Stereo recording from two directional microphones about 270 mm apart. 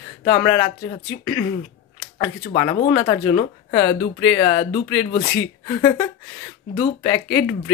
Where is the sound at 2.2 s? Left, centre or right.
Centre.